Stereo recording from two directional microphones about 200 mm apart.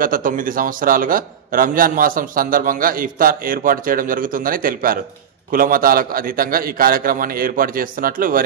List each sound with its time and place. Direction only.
0.0 s a man's voice: 45° right (ahead or behind)